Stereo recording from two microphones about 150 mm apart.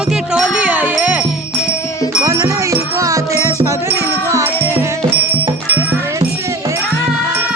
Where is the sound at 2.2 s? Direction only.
20° right (ahead or behind).